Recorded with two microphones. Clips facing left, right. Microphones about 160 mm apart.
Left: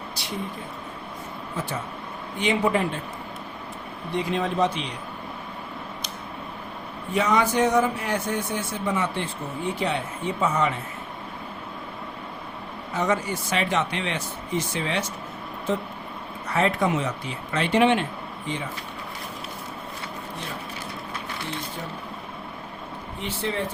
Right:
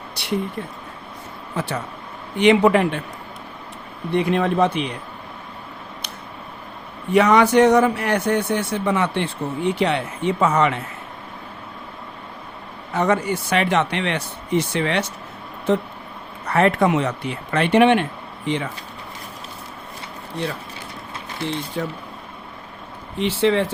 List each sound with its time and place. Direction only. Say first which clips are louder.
0.2 s speech: even; 65° right (ahead or behind)
1.5 s speech: right 5 dB; 75° right (ahead or behind)
4.1 s speech: right 6 dB; 65° right (ahead or behind)
7.1 s speech: right 8 dB; 70° right (ahead or behind)
12.9 s speech: right 5 dB; 65° right (ahead or behind)
18.4 s speech: right 8 dB; 75° right (ahead or behind)
21.8 s speech: right 9 dB; 90° right
23.1 s speech: right 11 dB; 90° right